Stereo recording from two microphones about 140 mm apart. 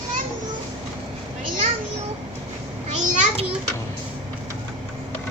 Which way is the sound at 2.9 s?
55° right (ahead or behind).